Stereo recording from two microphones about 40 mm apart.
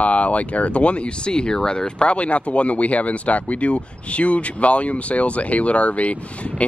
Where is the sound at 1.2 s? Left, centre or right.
Left.